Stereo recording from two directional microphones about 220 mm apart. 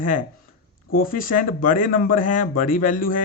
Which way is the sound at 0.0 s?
35° left (ahead or behind).